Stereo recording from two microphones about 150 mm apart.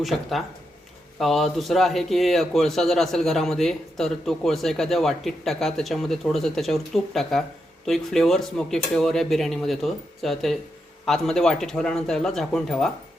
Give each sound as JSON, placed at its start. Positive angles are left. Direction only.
{"t": 0.0, "sound": "a man's voice", "side_deg": 0}